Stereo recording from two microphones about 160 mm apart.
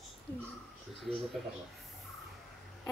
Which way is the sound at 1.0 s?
Centre (ahead or behind).